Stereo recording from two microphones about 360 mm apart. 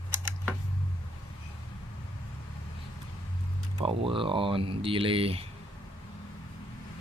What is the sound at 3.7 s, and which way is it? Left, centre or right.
Speech, centre.